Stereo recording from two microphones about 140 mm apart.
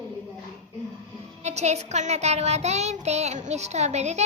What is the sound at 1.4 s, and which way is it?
Child singing, 50° right (ahead or behind).